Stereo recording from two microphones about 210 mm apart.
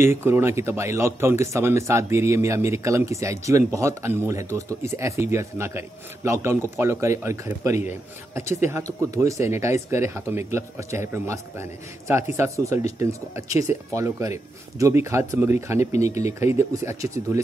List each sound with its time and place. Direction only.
0.0 s speech: 10° right (ahead or behind)
9.0 s speech: 15° right (ahead or behind)
15.8 s speech: 30° left (ahead or behind)
16.5 s speech: 15° right (ahead or behind)